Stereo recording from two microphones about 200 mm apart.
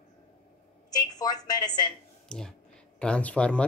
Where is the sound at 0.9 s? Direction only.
20° left (ahead or behind).